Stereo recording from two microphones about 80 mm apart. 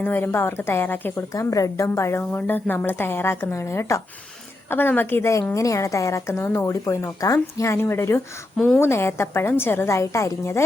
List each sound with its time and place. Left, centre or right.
0.0 s speech: left
1.3 s a woman's voice: left
5.5 s a woman's voice: left
8.5 s a woman's voice: centre
8.8 s a woman's voice: left